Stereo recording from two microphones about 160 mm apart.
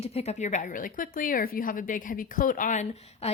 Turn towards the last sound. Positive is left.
turn(degrees=50)  # may be behind; listen again after turning